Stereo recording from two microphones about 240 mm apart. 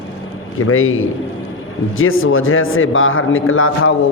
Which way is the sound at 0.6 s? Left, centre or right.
Left.